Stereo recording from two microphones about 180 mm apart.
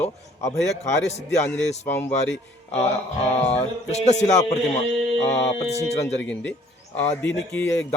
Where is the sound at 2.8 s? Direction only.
35° left (ahead or behind).